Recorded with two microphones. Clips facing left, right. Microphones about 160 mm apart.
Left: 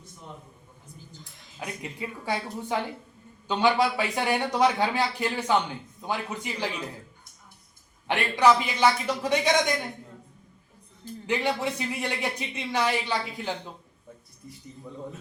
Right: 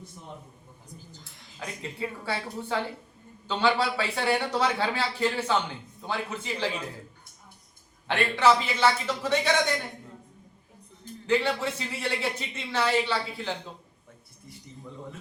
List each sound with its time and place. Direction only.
1.2 s speech: 15° left (ahead or behind)
8.0 s speech: 15° left (ahead or behind)
11.3 s speech: 15° left (ahead or behind)